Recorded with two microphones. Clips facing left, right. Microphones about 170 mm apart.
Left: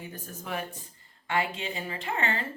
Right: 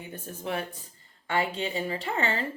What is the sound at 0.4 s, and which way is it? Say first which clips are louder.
Speech: right 3 dB; 30° right (ahead or behind).